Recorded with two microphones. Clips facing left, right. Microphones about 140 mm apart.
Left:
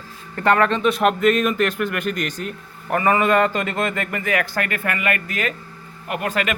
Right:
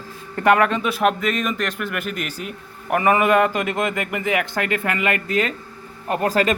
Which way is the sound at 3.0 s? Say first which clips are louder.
Right 1 dB; 15° right (ahead or behind).